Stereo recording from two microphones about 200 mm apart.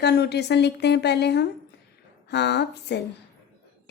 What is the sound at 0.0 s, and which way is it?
Speech, 55° left (ahead or behind).